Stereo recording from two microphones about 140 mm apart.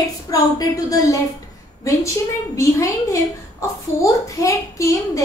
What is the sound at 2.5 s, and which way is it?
A woman's voice, 20° left (ahead or behind).